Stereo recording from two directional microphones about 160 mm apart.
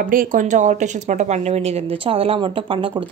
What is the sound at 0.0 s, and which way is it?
A woman's voice, 60° right (ahead or behind).